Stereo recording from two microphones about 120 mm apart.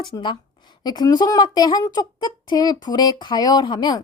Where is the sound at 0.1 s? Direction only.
35° left (ahead or behind).